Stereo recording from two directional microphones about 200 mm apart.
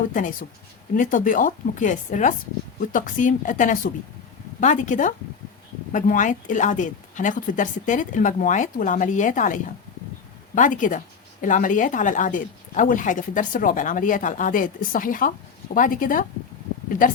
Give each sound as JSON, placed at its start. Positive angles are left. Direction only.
{"t": 0.1, "sound": "speech", "side_deg": 45}